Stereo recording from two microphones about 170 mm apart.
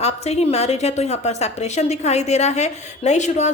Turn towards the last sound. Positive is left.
turn(degrees=45)  # may be behind; listen again after turning